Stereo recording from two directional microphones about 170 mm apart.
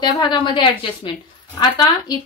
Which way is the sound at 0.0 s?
25° left (ahead or behind).